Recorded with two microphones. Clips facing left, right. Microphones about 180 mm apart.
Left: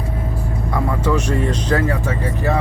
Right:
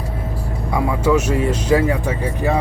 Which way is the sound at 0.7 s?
10° right (ahead or behind).